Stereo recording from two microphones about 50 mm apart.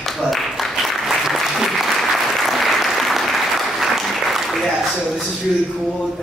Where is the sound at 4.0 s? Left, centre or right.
Centre.